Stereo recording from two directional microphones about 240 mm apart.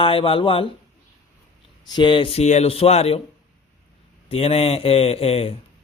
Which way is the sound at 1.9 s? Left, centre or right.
Centre.